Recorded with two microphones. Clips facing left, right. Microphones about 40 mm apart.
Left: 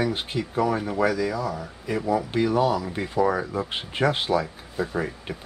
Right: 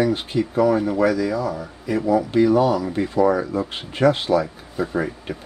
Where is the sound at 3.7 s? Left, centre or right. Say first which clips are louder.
Right 4 dB; left.